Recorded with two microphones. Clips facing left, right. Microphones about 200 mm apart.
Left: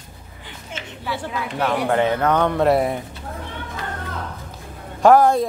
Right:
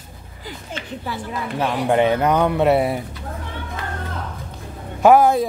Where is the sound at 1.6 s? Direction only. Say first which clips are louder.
Right 1 dB; 20° right (ahead or behind).